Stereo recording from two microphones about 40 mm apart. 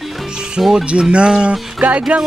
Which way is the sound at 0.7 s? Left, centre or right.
Right.